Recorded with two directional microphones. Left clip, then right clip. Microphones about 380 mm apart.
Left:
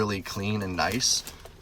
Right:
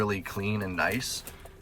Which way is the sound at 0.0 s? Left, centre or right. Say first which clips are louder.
Left 1 dB; centre.